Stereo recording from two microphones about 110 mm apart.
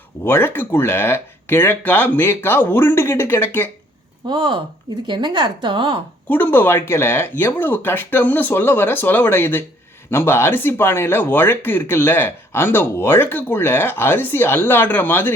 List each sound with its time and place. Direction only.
0.3 s speech: 20° left (ahead or behind)
4.3 s a woman's voice: 50° right (ahead or behind)
6.2 s speech: 15° left (ahead or behind)